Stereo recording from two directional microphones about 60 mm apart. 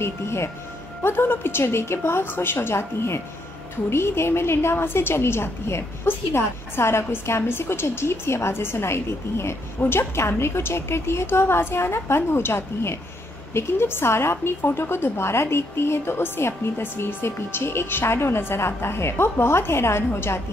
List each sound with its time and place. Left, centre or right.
0.0 s a woman's voice: left